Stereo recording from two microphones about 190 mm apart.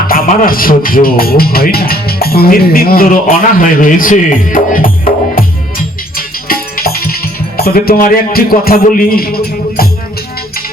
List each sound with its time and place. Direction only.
0.1 s speech: 50° left (ahead or behind)
5.3 s music: 50° left (ahead or behind)